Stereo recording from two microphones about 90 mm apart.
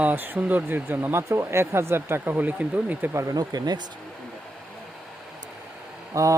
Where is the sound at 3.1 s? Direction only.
30° right (ahead or behind).